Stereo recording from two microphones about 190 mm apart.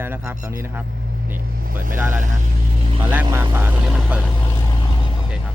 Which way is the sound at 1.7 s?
45° right (ahead or behind).